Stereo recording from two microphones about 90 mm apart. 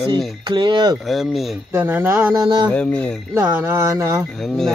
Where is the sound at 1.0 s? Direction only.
Centre (ahead or behind).